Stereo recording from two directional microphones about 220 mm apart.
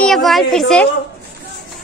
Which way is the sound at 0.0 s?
Centre (ahead or behind).